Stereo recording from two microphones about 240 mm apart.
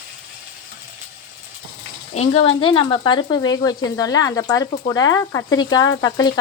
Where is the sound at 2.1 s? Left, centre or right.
Left.